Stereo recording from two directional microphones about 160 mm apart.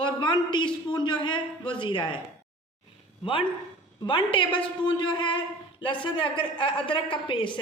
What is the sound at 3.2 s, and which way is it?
A man's voice, 35° left (ahead or behind).